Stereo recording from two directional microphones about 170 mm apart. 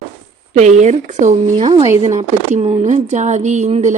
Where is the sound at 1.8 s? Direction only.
20° right (ahead or behind).